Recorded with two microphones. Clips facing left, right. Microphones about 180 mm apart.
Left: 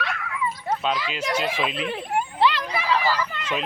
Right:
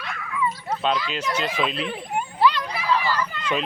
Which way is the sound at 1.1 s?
10° left (ahead or behind).